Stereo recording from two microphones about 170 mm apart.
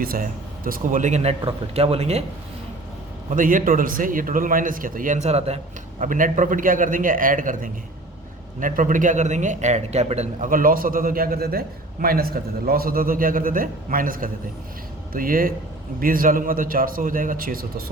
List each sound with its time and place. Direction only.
0.0 s speech: 60° right (ahead or behind); by 2.2 s 40° right (ahead or behind)
3.2 s a man's voice: 55° right (ahead or behind)
6.0 s a man's voice: 50° right (ahead or behind)
10.5 s a man's voice: 55° right (ahead or behind)